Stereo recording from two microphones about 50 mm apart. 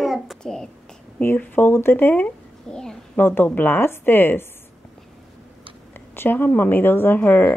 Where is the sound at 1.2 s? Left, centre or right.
Left.